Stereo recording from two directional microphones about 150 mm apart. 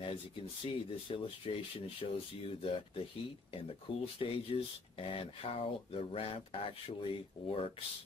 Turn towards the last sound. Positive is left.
turn(degrees=35)  # may be behind; listen again after turning